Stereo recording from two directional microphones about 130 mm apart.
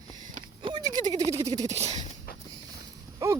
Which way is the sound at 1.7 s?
55° right (ahead or behind).